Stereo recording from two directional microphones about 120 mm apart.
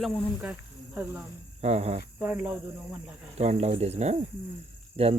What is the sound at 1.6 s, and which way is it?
Speech, 60° right (ahead or behind).